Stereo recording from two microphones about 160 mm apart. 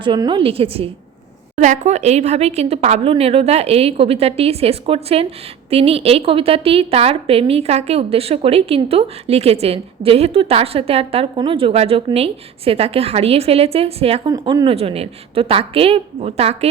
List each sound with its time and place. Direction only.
0.0 s a woman's voice: 30° right (ahead or behind)
1.5 s a woman's voice: 50° right (ahead or behind)
14.3 s a woman's voice: 25° right (ahead or behind)